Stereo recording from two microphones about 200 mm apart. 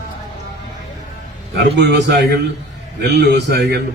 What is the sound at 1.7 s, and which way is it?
A man's voice, 60° right (ahead or behind).